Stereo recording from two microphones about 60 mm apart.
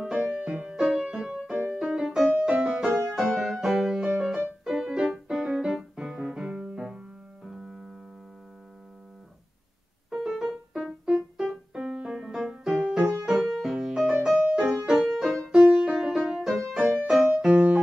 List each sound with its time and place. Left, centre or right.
0.0 s music: centre
10.0 s keyboard: centre
12.1 s music: centre
17.5 s music: right